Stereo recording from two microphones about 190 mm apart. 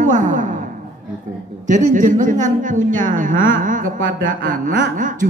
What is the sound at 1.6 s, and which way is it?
A woman's voice, 40° right (ahead or behind).